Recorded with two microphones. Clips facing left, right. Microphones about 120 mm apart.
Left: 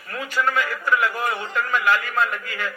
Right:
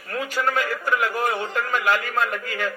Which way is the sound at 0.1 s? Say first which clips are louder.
Even; 40° right (ahead or behind).